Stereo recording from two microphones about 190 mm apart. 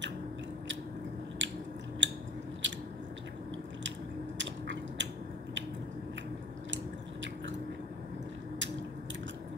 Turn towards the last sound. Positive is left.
turn(degrees=-75)  # may be behind; listen again after turning